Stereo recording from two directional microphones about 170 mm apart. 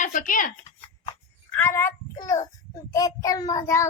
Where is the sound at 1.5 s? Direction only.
10° left (ahead or behind).